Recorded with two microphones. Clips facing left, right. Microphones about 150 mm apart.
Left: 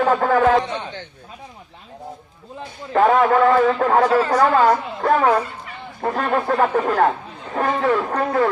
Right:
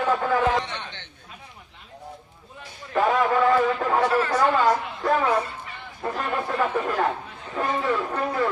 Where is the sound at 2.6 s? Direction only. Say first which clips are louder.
Left 6 dB; 60° left (ahead or behind).